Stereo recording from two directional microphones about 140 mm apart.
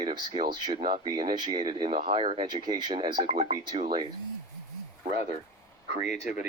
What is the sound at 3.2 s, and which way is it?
Speech, 50° right (ahead or behind).